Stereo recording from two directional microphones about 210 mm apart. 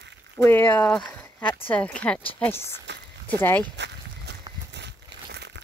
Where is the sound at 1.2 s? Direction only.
5° left (ahead or behind).